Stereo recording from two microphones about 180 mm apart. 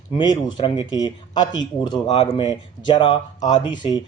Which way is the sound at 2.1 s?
35° left (ahead or behind).